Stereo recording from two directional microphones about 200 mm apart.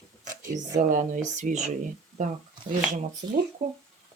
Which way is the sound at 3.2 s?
20° right (ahead or behind).